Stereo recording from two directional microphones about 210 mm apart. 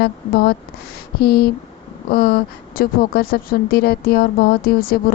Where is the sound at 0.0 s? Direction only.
45° left (ahead or behind).